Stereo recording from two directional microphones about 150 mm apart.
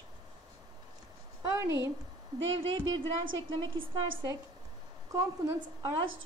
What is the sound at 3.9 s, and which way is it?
A woman's voice, 30° right (ahead or behind).